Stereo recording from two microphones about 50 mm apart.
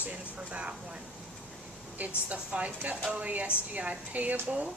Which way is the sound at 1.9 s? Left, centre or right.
Right.